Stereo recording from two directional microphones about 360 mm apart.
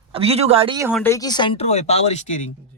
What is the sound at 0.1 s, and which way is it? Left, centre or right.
Speech, centre.